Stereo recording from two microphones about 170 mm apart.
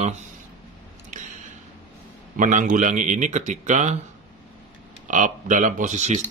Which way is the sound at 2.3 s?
50° right (ahead or behind).